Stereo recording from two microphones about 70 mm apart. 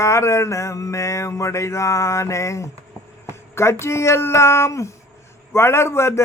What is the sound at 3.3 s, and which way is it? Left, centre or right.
Speech, left.